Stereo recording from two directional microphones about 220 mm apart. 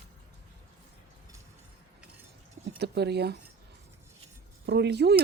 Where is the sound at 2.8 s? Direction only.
50° right (ahead or behind).